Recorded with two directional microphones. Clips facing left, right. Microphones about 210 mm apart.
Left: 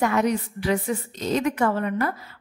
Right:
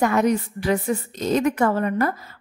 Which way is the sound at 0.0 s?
45° right (ahead or behind).